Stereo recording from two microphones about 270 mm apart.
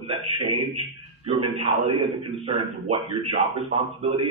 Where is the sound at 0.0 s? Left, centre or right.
Centre.